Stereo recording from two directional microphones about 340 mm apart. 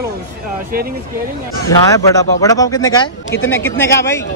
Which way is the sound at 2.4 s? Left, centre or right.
Centre.